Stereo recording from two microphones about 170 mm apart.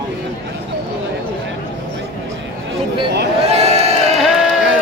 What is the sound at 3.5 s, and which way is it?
Crowd, 40° right (ahead or behind).